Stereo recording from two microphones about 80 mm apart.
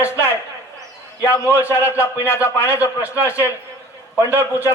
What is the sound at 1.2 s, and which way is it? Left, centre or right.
A man's voice, left.